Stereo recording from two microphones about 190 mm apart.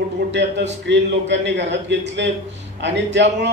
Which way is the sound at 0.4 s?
65° right (ahead or behind).